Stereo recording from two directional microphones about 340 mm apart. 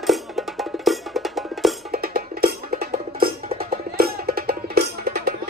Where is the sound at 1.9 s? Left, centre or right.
Right.